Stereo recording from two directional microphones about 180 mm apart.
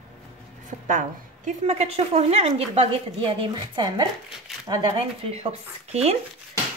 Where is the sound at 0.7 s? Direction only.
45° right (ahead or behind); by 5.0 s 20° right (ahead or behind).